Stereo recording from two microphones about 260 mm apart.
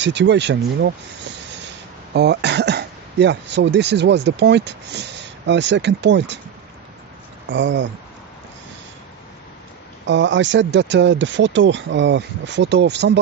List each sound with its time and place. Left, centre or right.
0.0 s speech: right
2.1 s speech: right
7.4 s speech: right
10.0 s speech: right